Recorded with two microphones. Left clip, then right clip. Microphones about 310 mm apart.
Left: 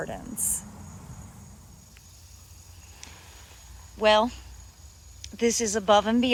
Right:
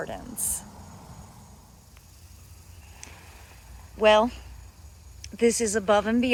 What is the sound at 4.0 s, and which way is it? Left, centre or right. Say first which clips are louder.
Speech: right 2 dB; centre.